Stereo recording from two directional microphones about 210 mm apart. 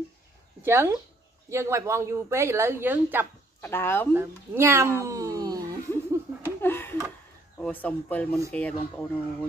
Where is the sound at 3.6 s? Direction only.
10° left (ahead or behind).